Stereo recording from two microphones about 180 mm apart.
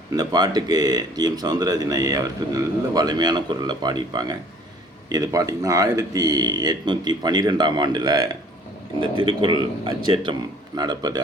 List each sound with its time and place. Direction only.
0.1 s speech: 20° right (ahead or behind)